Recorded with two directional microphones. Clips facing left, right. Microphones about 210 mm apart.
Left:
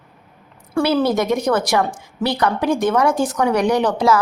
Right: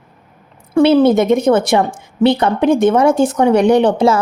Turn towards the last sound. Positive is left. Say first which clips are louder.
# right 5 dB
turn(degrees=-25)  # may be behind; listen again after turning